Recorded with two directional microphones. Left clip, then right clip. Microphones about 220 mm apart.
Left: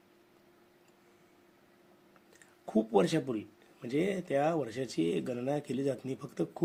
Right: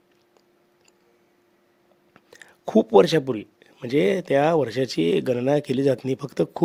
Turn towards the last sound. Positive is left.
turn(degrees=-50)  # may be behind; listen again after turning